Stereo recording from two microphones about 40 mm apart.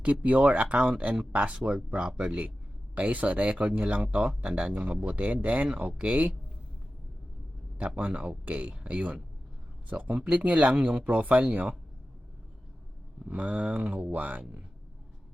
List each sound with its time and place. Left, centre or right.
0.0 s speech: right
5.0 s speech: right
7.8 s speech: right
13.2 s speech: right